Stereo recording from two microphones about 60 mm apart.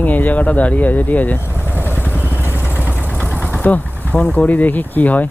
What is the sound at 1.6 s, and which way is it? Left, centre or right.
Vehicle, left.